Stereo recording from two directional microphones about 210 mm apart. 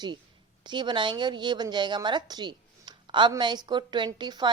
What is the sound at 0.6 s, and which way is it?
A woman's voice, 20° right (ahead or behind).